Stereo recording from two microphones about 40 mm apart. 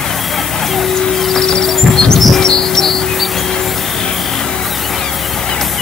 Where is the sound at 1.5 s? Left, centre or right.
Centre.